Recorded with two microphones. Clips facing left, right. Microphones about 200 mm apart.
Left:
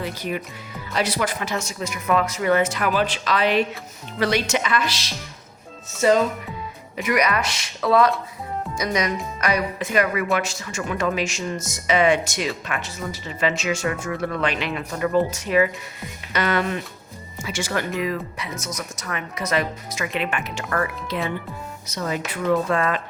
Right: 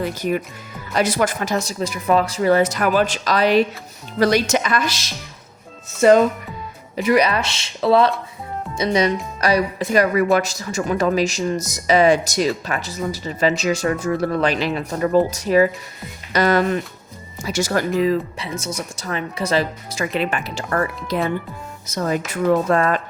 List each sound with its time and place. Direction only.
0.0 s speech: 45° right (ahead or behind)
6.9 s speech: 30° right (ahead or behind)
21.8 s speech: 45° right (ahead or behind)